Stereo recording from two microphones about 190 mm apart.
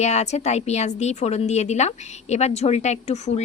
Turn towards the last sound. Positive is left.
turn(degrees=35)  # may be behind; listen again after turning